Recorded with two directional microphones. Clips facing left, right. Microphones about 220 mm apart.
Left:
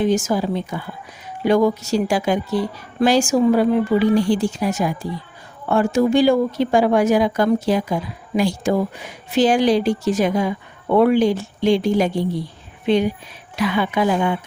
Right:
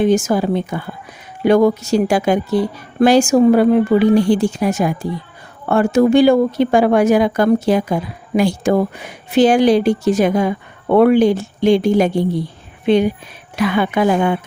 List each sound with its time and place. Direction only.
0.0 s a woman's voice: 60° right (ahead or behind)